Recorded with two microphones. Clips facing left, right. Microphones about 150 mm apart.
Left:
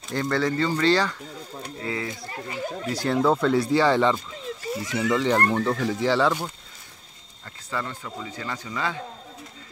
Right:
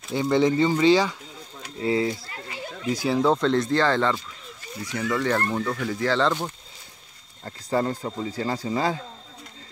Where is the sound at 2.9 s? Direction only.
5° right (ahead or behind).